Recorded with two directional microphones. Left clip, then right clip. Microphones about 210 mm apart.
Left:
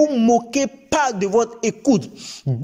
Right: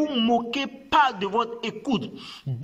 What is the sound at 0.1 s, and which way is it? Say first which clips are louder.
Speech: left 6 dB; 25° left (ahead or behind).